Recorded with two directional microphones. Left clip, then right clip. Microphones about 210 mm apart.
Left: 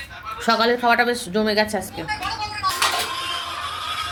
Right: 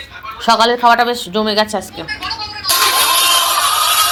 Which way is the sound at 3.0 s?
55° right (ahead or behind).